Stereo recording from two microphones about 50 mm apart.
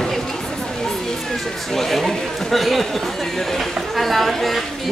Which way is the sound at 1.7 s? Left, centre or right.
Centre.